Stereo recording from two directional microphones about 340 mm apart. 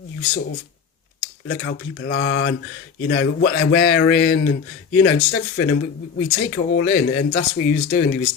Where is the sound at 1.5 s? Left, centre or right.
Left.